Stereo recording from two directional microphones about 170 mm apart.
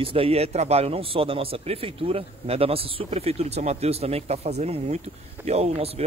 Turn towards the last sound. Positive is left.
turn(degrees=-35)  # may be behind; listen again after turning